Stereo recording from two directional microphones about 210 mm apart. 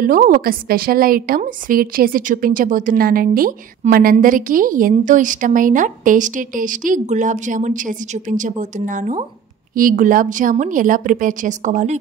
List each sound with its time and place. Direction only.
0.0 s a woman's voice: 40° right (ahead or behind)